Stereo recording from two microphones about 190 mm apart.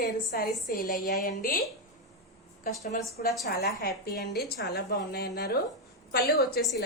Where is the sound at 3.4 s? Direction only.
55° left (ahead or behind).